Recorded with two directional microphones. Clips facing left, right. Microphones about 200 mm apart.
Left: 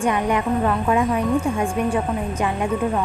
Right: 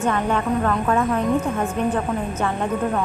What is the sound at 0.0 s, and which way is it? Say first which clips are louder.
A woman's voice: left 1 dB; 15° left (ahead or behind).